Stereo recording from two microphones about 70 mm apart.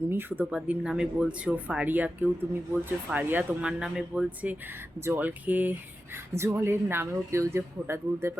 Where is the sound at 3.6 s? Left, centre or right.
Centre; by 5.1 s right.